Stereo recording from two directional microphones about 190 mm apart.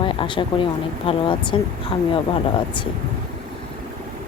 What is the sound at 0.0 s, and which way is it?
Speech, 25° left (ahead or behind).